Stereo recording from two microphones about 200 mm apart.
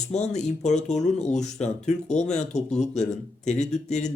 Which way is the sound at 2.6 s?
35° left (ahead or behind).